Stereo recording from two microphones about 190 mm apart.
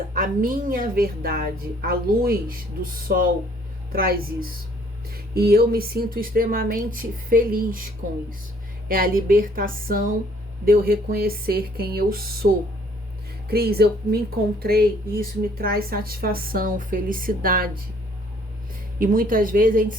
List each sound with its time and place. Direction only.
0.1 s speech: 45° right (ahead or behind)
8.9 s speech: 50° right (ahead or behind)
13.5 s speech: 55° right (ahead or behind)
18.9 s speech: 50° right (ahead or behind)